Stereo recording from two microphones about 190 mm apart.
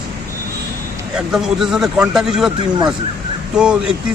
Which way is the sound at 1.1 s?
5° right (ahead or behind).